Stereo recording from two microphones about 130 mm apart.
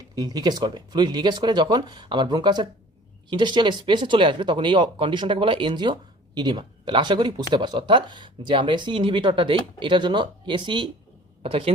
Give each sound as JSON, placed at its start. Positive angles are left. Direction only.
{"t": 0.2, "sound": "speech", "side_deg": -30}